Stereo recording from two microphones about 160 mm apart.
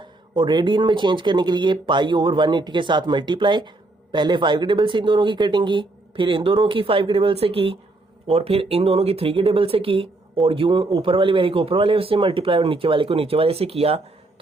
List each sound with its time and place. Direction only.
0.0 s speech: 30° right (ahead or behind)